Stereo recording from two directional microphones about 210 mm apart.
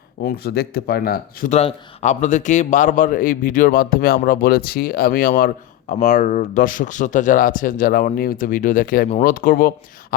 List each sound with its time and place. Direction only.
0.3 s speech: 50° left (ahead or behind)